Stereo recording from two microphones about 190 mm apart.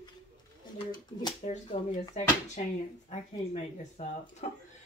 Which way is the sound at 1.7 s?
35° left (ahead or behind).